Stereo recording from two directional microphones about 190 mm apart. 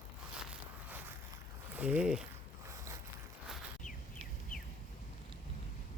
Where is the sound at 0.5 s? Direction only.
10° right (ahead or behind).